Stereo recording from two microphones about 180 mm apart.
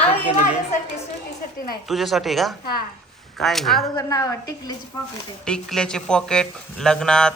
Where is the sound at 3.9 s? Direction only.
20° left (ahead or behind).